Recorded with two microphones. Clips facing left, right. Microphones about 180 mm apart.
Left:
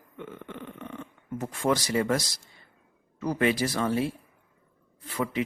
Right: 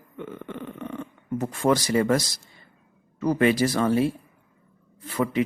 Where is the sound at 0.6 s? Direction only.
65° right (ahead or behind).